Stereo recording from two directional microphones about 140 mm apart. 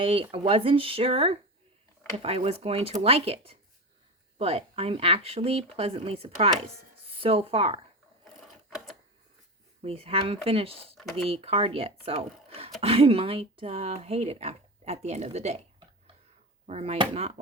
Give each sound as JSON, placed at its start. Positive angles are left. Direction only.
{"t": 0.0, "sound": "speech", "side_deg": -40}
{"t": 8.4, "sound": "sewing machine", "side_deg": 0}
{"t": 9.8, "sound": "speech", "side_deg": -45}
{"t": 10.9, "sound": "speech", "side_deg": 0}
{"t": 11.3, "sound": "speech", "side_deg": -45}
{"t": 16.6, "sound": "speech", "side_deg": -50}